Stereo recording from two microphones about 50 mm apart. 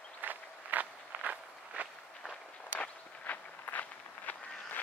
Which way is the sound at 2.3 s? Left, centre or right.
Left.